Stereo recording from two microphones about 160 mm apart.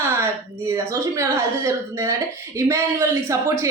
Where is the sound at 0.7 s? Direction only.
15° right (ahead or behind).